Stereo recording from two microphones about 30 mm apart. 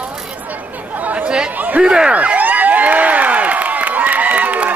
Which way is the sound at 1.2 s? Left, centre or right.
Right.